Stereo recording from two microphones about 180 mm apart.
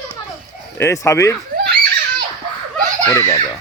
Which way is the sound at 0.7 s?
15° left (ahead or behind).